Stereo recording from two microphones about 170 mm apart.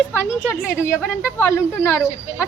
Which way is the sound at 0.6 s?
15° left (ahead or behind).